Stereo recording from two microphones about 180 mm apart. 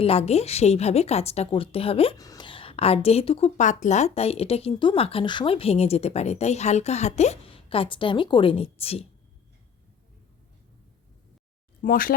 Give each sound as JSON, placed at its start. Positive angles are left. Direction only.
{"t": 0.0, "sound": "a woman's voice", "side_deg": 35}
{"t": 2.1, "sound": "a woman's voice", "side_deg": 20}
{"t": 11.8, "sound": "speech", "side_deg": 50}